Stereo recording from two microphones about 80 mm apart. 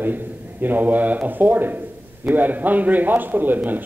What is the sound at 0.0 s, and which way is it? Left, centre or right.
A man's voice, right.